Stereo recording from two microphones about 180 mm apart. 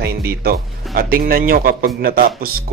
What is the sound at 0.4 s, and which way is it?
A man's voice, 55° right (ahead or behind).